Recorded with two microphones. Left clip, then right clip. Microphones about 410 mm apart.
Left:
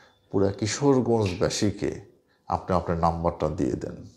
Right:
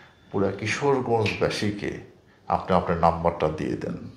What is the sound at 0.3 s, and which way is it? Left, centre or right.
A man's voice, left.